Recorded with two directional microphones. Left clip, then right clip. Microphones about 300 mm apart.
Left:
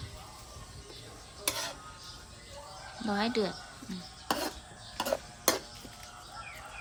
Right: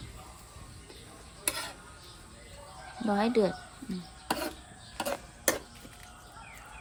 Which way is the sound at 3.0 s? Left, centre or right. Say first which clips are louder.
Right 4 dB; centre.